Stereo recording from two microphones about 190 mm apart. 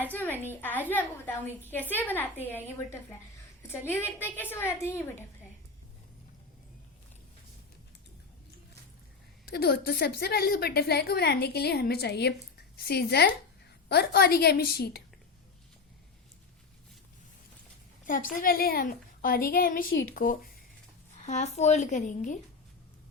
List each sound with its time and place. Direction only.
0.0 s a sound: 10° left (ahead or behind)
0.5 s a woman's voice: 10° left (ahead or behind)
9.5 s a woman's voice: 55° left (ahead or behind)
18.0 s a woman's voice: 45° left (ahead or behind)
21.2 s a woman's voice: 40° left (ahead or behind)